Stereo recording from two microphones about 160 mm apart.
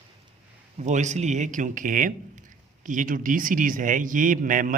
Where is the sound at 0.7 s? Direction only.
45° right (ahead or behind).